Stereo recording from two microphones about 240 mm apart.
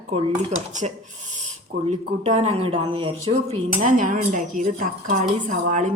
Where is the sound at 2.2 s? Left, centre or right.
Right.